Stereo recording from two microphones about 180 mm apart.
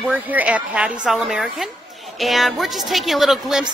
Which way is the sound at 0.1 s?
10° right (ahead or behind).